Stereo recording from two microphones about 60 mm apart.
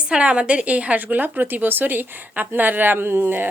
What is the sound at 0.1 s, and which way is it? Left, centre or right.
A woman's voice, centre.